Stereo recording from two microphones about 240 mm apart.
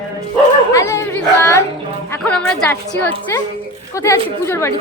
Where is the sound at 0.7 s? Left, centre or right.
Centre.